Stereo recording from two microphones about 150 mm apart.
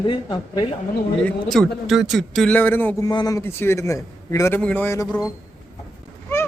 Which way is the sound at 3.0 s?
25° left (ahead or behind).